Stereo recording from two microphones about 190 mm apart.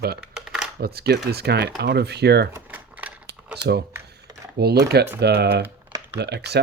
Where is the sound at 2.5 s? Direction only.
10° right (ahead or behind).